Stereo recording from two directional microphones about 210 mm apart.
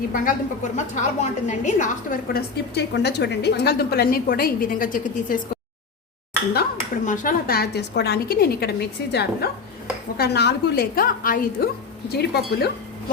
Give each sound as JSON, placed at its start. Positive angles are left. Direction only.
{"t": 0.1, "sound": "a woman's voice", "side_deg": 40}
{"t": 6.5, "sound": "a woman's voice", "side_deg": 40}